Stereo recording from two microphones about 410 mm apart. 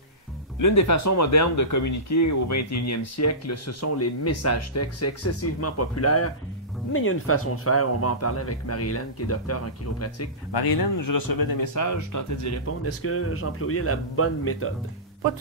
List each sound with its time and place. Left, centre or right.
0.6 s speech: left
10.5 s speech: left